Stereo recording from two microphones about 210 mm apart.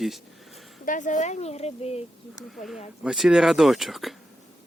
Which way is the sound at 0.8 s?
35° left (ahead or behind).